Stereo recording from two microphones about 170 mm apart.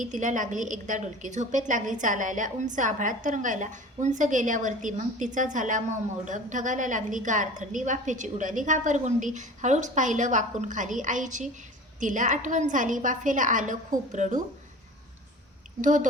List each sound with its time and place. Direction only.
0.0 s a woman's voice: 45° right (ahead or behind)
15.8 s a woman's voice: 50° right (ahead or behind)